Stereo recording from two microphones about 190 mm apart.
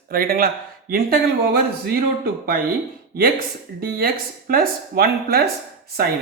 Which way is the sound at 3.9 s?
50° right (ahead or behind).